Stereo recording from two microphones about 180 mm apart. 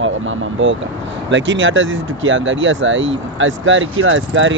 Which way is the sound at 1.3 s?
90° right.